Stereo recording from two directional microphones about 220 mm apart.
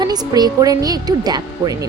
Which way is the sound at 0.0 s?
20° right (ahead or behind).